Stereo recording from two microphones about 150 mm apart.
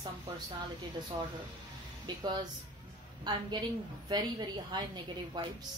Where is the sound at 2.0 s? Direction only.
30° right (ahead or behind).